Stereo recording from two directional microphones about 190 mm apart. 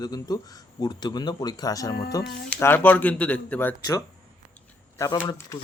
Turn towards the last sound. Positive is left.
turn(degrees=20)  # may be behind; listen again after turning